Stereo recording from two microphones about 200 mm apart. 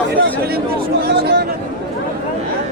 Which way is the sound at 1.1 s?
55° right (ahead or behind).